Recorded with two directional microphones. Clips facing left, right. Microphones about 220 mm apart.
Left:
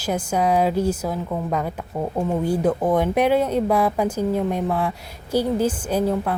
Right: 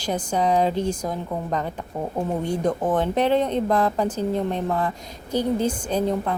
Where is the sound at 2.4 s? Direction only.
5° left (ahead or behind).